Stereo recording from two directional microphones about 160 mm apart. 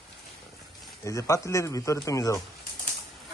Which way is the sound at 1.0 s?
20° left (ahead or behind).